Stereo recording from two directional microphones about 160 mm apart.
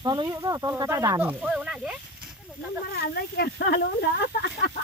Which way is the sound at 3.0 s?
80° left.